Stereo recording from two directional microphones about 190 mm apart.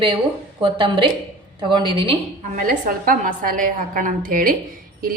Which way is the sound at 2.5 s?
45° right (ahead or behind).